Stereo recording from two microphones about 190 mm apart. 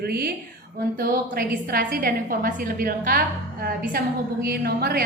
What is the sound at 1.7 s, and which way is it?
A woman's voice, 50° right (ahead or behind).